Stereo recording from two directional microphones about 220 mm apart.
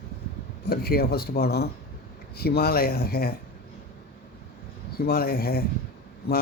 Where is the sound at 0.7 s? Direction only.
45° left (ahead or behind).